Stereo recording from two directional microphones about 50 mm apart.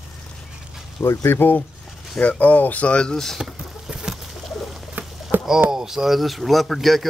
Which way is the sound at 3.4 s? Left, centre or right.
Centre.